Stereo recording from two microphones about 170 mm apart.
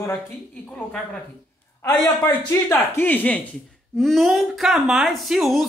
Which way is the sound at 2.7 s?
10° left (ahead or behind).